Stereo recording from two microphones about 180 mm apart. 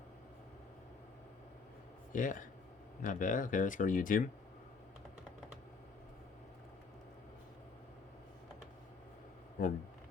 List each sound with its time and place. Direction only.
2.1 s speech: 45° left (ahead or behind)
9.6 s speech: 55° left (ahead or behind)